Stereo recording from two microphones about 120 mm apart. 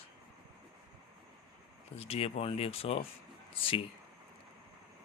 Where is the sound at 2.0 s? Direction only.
55° left (ahead or behind).